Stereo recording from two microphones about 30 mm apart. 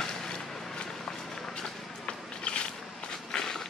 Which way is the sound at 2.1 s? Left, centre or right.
Left.